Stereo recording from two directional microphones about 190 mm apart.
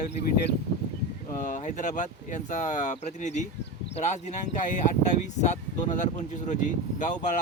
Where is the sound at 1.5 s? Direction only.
40° left (ahead or behind).